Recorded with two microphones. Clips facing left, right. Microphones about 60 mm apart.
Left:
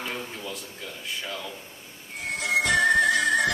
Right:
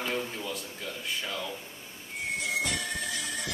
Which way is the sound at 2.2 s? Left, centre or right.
Left.